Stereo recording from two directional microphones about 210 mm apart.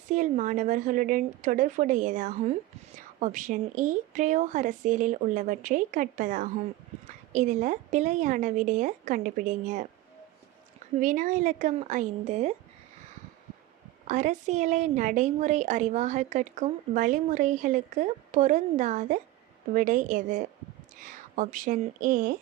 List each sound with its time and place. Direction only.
0.1 s a woman's voice: 35° right (ahead or behind)
10.9 s a woman's voice: 40° right (ahead or behind)
14.1 s a woman's voice: 35° right (ahead or behind)